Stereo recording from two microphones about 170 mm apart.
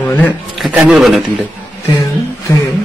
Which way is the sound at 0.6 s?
Centre (ahead or behind).